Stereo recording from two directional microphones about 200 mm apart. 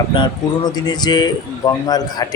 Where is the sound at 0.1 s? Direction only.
20° left (ahead or behind).